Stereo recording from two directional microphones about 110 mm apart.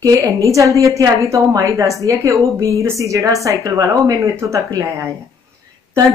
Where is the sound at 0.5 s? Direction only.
30° right (ahead or behind).